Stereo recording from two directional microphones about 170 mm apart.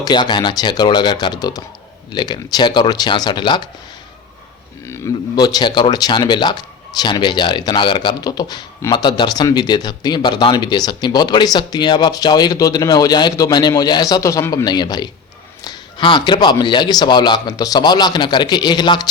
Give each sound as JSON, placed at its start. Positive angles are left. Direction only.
{"t": 0.0, "sound": "speech", "side_deg": 25}
{"t": 4.9, "sound": "speech", "side_deg": 20}